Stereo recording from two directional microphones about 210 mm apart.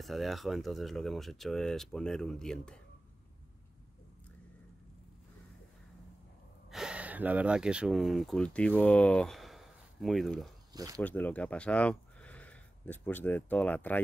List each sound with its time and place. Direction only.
0.0 s speech: centre (ahead or behind)
6.7 s speech: 5° right (ahead or behind)
10.7 s speech: 15° right (ahead or behind)
11.0 s speech: 10° left (ahead or behind)